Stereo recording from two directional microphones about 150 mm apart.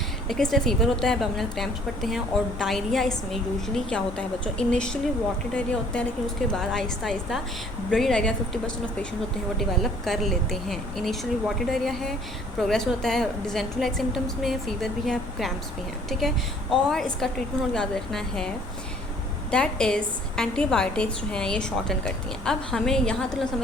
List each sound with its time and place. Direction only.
0.3 s a woman's voice: 5° left (ahead or behind)